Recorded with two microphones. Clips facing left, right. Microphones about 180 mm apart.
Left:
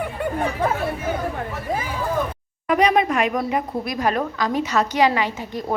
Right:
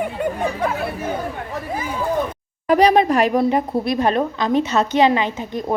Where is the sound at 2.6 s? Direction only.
35° right (ahead or behind).